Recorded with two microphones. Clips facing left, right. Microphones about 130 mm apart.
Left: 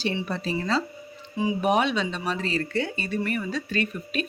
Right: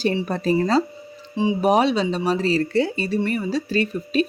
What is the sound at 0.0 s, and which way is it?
Speech, 40° right (ahead or behind).